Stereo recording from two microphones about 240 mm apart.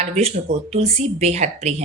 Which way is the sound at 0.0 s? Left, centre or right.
Right.